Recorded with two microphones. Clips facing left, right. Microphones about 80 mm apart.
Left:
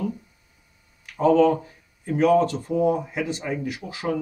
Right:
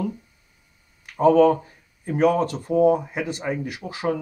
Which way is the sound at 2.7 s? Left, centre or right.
Centre.